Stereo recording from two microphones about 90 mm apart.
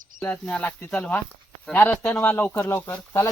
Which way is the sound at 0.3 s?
15° left (ahead or behind).